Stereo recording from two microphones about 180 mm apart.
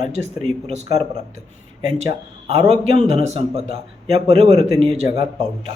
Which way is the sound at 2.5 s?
35° right (ahead or behind).